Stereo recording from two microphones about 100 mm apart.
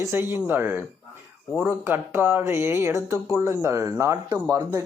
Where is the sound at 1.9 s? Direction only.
20° right (ahead or behind).